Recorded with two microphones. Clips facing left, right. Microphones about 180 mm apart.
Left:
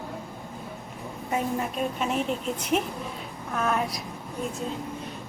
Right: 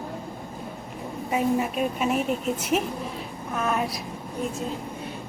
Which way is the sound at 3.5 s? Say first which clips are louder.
Even; centre (ahead or behind).